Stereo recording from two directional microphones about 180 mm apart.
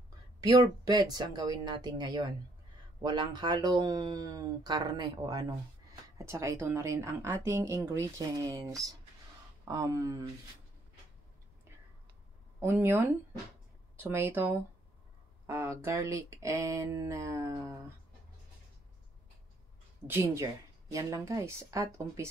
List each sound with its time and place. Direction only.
0.4 s speech: 20° right (ahead or behind)
12.5 s speech: 15° right (ahead or behind)
20.1 s speech: 15° right (ahead or behind)